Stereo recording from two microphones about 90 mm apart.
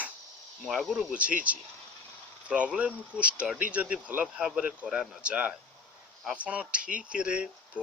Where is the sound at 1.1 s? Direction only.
15° right (ahead or behind).